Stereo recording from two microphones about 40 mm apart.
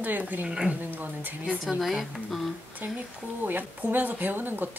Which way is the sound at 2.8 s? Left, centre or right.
Right.